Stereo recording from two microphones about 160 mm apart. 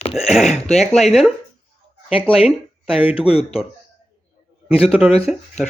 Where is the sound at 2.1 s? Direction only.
35° left (ahead or behind).